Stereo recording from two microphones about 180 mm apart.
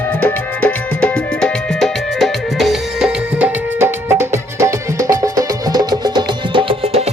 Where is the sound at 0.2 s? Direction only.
5° left (ahead or behind).